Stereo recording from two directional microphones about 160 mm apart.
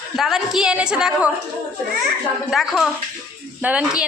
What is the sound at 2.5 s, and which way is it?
A woman's voice, centre (ahead or behind).